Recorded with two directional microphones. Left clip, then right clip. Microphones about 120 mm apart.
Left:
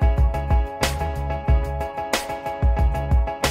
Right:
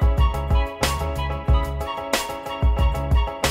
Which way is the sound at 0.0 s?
Centre (ahead or behind).